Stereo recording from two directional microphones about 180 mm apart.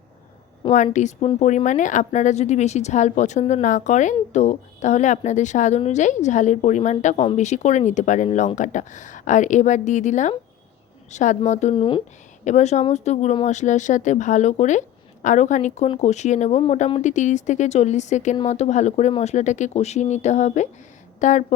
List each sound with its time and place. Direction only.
0.7 s speech: 40° left (ahead or behind)
12.5 s speech: 40° left (ahead or behind)